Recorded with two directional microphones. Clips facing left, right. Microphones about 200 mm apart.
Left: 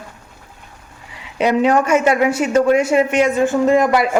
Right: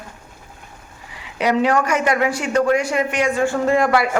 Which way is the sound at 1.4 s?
25° left (ahead or behind).